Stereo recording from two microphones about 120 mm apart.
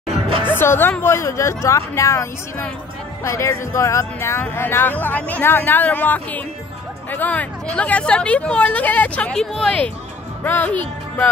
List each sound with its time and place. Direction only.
0.5 s speech: 20° left (ahead or behind); by 9.8 s centre (ahead or behind)
10.4 s speech: 15° left (ahead or behind)